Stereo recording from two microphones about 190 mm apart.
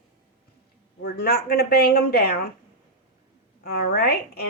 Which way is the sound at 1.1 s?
55° left (ahead or behind).